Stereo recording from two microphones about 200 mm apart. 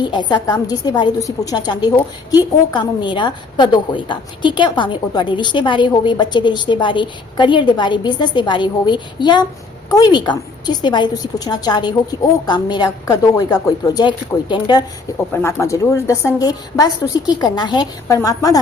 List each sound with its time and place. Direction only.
0.0 s a woman's voice: 20° left (ahead or behind)
15.3 s a woman's voice: 10° left (ahead or behind)